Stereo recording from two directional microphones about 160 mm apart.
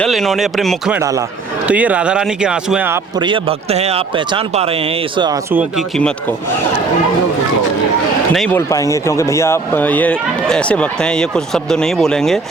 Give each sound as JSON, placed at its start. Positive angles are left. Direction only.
{"t": 0.0, "sound": "speech", "side_deg": 0}
{"t": 0.9, "sound": "a man's voice", "side_deg": -20}
{"t": 1.6, "sound": "speech", "side_deg": -10}
{"t": 3.2, "sound": "speech", "side_deg": -30}
{"t": 8.4, "sound": "speech", "side_deg": 20}